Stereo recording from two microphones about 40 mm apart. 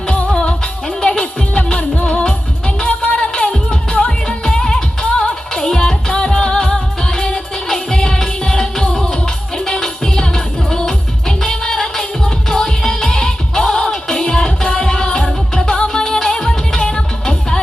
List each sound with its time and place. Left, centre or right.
0.3 s music: centre